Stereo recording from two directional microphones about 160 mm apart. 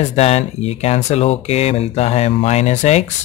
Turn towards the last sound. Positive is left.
turn(degrees=45)  # may be behind; listen again after turning